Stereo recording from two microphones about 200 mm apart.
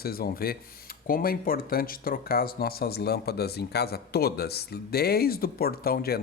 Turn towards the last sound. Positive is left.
turn(degrees=50)  # may be behind; listen again after turning